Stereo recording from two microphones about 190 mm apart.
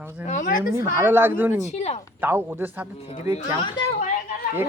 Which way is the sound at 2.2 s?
10° right (ahead or behind).